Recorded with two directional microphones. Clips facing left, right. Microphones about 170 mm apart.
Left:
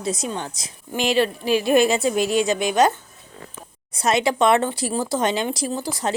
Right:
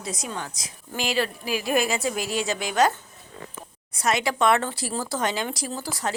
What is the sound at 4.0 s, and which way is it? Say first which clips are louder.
Speech: left 4 dB; 25° left (ahead or behind).